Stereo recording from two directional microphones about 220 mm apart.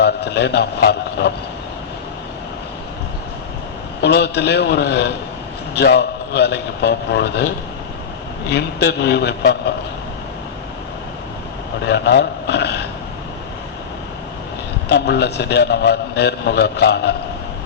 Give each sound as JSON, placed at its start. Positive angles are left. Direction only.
{"t": 0.0, "sound": "a man's voice", "side_deg": 50}
{"t": 4.0, "sound": "a man's voice", "side_deg": 50}
{"t": 11.9, "sound": "a man's voice", "side_deg": 50}
{"t": 14.8, "sound": "a man's voice", "side_deg": 50}